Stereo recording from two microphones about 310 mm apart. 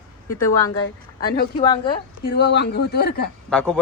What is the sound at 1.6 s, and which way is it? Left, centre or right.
Speech, centre.